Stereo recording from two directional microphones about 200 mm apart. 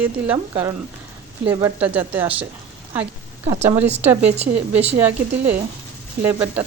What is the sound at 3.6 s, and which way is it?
A woman's voice, 10° right (ahead or behind).